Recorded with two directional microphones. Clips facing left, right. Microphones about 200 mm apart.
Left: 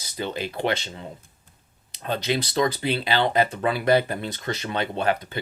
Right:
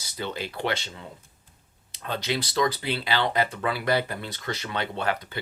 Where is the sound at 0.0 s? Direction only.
20° left (ahead or behind).